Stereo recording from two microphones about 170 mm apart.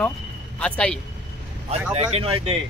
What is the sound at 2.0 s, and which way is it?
Speech, 35° right (ahead or behind).